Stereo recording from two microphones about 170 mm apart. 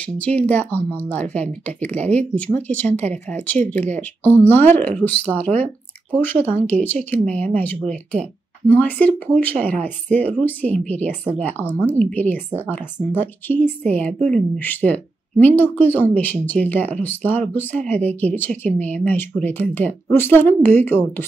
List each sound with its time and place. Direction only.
0.0 s speech: 10° left (ahead or behind)
7.8 s speech: 45° right (ahead or behind)
8.7 s speech: 10° left (ahead or behind)